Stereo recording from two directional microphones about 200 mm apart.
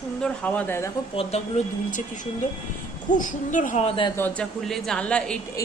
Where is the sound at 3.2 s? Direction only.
40° left (ahead or behind).